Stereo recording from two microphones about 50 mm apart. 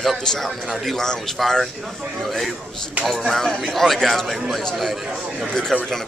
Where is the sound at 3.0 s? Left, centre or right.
Centre.